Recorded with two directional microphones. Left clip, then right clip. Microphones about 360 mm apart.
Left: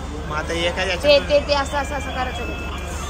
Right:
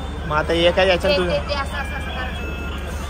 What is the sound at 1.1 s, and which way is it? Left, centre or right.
Speech, left.